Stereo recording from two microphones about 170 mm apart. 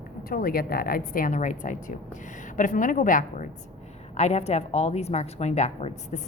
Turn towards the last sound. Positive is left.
turn(degrees=40)  # may be behind; listen again after turning